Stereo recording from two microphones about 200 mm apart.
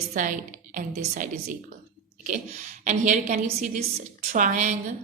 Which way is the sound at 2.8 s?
40° right (ahead or behind).